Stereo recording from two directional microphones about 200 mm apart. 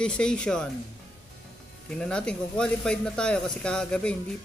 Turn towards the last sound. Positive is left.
turn(degrees=5)  # may be behind; listen again after turning